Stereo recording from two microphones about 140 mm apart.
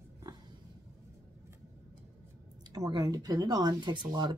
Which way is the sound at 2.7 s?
25° right (ahead or behind).